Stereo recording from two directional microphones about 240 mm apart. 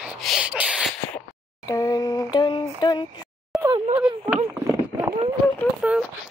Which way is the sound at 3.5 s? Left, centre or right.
Centre.